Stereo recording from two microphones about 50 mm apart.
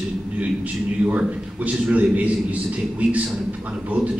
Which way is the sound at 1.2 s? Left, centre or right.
Right.